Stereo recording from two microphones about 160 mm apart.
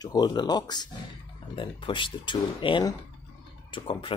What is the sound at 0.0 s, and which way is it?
Speech, 25° left (ahead or behind).